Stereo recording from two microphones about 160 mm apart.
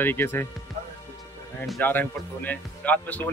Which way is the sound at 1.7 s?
10° left (ahead or behind).